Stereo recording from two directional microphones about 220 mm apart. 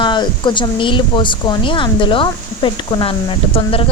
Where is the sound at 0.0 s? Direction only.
20° left (ahead or behind).